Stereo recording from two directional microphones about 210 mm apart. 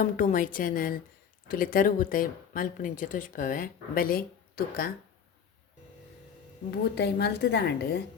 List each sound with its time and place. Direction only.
0.0 s speech: 40° left (ahead or behind)
6.9 s a woman's voice: 55° left (ahead or behind)